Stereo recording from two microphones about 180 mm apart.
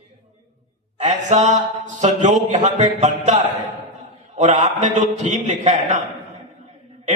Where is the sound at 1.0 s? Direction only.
40° right (ahead or behind).